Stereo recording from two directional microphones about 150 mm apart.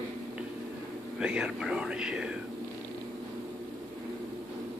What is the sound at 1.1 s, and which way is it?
Speech, 5° right (ahead or behind).